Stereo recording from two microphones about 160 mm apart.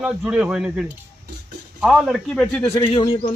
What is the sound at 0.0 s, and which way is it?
Speech, 5° right (ahead or behind).